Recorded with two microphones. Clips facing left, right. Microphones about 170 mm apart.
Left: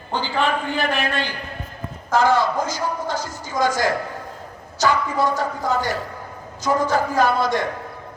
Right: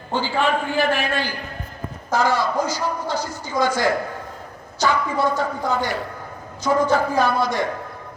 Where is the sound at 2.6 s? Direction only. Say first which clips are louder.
Right 1 dB; 50° left (ahead or behind).